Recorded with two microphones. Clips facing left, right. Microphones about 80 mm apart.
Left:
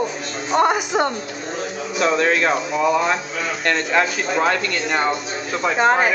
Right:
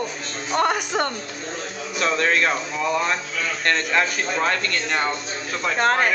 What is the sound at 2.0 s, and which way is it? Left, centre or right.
A man's voice, centre.